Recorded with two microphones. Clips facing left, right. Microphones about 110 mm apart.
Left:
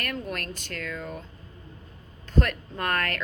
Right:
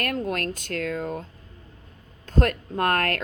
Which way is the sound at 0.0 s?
45° right (ahead or behind).